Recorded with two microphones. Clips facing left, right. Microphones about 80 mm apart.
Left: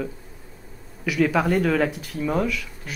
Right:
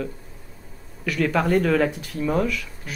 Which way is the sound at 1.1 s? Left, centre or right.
Centre.